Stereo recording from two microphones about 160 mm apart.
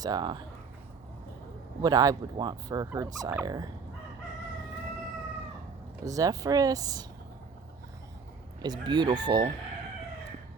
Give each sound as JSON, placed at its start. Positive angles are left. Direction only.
{"t": 0.0, "sound": "turkey", "side_deg": -25}
{"t": 1.8, "sound": "turkey", "side_deg": -25}
{"t": 6.1, "sound": "turkey", "side_deg": -20}
{"t": 8.6, "sound": "turkey", "side_deg": -25}